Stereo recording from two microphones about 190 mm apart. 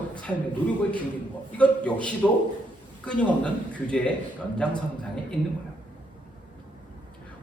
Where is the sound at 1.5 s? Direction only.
5° left (ahead or behind).